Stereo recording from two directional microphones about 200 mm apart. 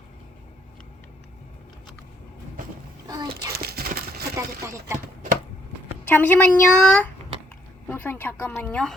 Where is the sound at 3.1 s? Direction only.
20° right (ahead or behind).